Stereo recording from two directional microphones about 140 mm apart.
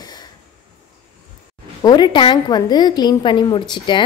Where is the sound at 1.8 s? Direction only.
30° left (ahead or behind).